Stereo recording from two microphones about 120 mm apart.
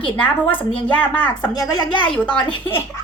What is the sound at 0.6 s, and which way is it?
Speech, 50° left (ahead or behind).